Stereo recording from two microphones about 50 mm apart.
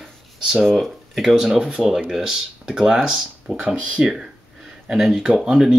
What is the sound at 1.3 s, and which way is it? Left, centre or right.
Speech, centre.